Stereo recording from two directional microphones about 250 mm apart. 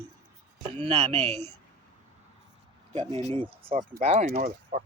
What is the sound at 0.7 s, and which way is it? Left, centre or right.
Speech, right.